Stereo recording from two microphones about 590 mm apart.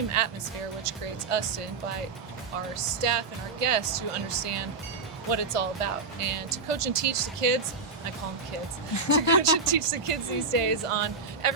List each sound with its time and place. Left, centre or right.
0.2 s speech: right
2.7 s speech: right
9.0 s speech: left
9.4 s speech: right